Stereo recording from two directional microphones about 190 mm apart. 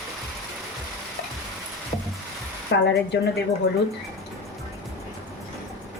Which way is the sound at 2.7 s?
65° left (ahead or behind).